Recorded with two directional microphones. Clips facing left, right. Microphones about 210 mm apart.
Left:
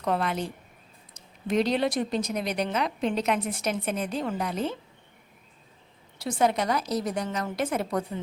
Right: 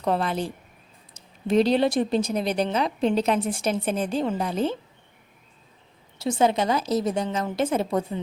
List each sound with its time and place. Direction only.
0.0 s a woman's voice: 30° right (ahead or behind)
6.1 s a woman's voice: 25° right (ahead or behind)